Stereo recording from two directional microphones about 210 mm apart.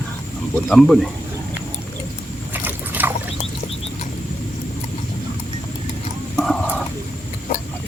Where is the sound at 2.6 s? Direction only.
10° right (ahead or behind).